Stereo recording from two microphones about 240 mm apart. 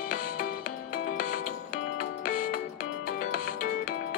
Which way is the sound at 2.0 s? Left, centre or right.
Left.